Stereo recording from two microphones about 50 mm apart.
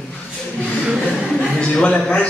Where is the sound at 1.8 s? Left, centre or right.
Left.